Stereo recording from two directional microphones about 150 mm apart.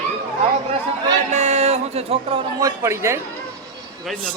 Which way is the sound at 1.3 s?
50° right (ahead or behind).